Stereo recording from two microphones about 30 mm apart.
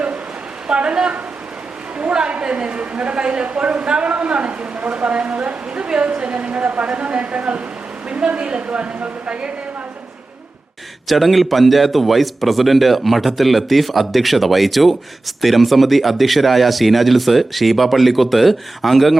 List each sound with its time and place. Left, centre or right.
0.7 s a woman's voice: right
2.4 s a woman's voice: right
4.8 s a woman's voice: right
11.1 s speech: centre